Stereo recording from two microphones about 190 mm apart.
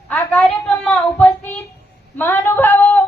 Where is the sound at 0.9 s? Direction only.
10° left (ahead or behind).